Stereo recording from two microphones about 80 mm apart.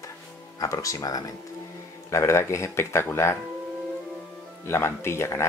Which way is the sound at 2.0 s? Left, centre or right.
Left.